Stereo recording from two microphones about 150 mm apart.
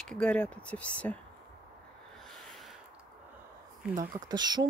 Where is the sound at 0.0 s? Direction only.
5° left (ahead or behind).